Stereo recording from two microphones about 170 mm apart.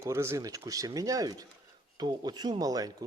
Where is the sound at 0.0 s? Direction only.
15° right (ahead or behind).